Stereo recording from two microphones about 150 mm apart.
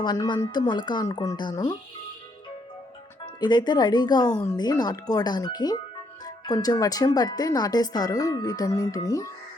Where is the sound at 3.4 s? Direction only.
30° left (ahead or behind).